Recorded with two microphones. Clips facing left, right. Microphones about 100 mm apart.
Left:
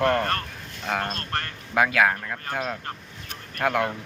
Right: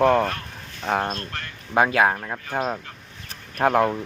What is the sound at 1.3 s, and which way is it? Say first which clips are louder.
Speech: left 5 dB; 60° left (ahead or behind).